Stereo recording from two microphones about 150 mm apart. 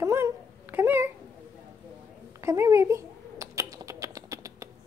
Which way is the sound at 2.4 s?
20° right (ahead or behind).